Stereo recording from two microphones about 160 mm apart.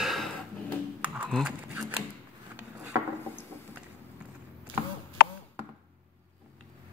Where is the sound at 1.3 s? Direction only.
Centre (ahead or behind).